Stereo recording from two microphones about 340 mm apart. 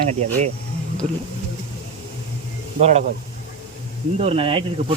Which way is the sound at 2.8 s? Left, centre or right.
Centre.